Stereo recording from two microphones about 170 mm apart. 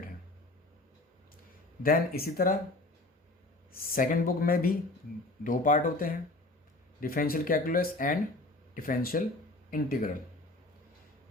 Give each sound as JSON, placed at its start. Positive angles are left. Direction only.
{"t": 1.8, "sound": "speech", "side_deg": 60}
{"t": 3.7, "sound": "speech", "side_deg": 55}